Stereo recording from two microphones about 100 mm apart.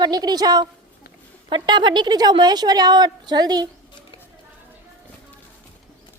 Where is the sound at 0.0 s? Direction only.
40° right (ahead or behind).